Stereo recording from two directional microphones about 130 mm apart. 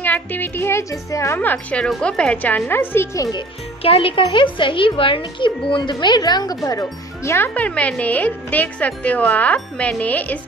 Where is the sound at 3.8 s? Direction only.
45° left (ahead or behind).